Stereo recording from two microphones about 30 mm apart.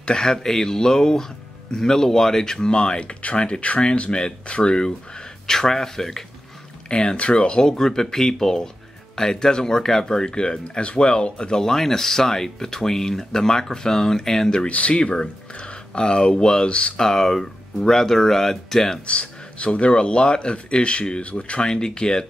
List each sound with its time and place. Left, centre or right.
0.0 s speech: left
2.7 s speech: left
5.5 s speech: centre
6.9 s speech: left
7.6 s speech: centre
10.8 s speech: left
11.5 s speech: centre
14.7 s speech: left
15.9 s speech: left
17.0 s speech: centre
19.0 s speech: left
21.6 s speech: left